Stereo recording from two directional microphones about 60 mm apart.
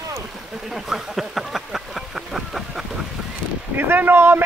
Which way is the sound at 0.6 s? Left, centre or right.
Centre.